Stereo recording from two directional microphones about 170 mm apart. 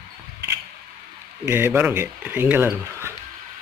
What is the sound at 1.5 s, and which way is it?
Speech, 15° right (ahead or behind).